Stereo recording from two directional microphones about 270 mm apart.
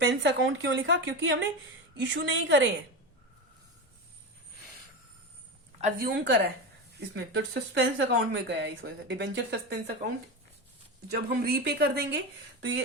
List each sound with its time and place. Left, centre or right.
0.0 s a woman's voice: right
5.8 s speech: right
7.1 s speech: right
11.1 s speech: right